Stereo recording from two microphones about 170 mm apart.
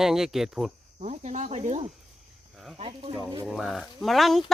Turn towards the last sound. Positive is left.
turn(degrees=0)  # may be behind; listen again after turning